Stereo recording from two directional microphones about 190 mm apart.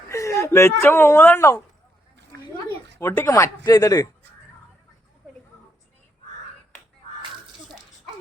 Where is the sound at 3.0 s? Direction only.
10° left (ahead or behind).